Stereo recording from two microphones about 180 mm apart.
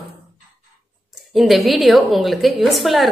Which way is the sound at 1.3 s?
Centre (ahead or behind).